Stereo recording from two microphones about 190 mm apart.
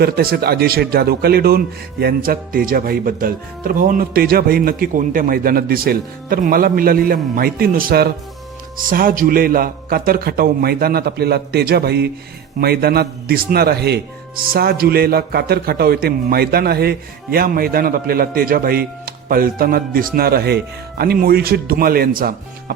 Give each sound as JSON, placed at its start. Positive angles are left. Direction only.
{"t": 0.0, "sound": "a man's voice", "side_deg": -55}